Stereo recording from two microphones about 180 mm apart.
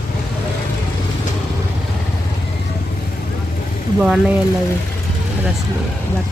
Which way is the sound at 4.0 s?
5° right (ahead or behind).